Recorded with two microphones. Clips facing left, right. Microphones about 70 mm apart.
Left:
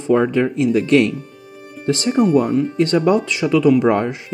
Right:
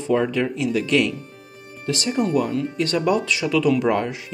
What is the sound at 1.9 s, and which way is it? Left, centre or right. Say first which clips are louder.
Speech: left 6 dB; left.